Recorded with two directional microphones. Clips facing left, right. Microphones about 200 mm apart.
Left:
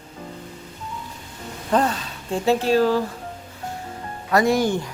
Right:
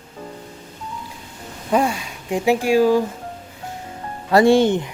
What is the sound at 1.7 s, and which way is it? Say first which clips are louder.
Speech: right 2 dB; 10° right (ahead or behind).